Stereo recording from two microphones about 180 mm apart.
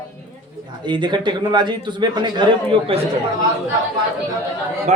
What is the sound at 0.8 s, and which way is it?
A man's voice, 25° right (ahead or behind).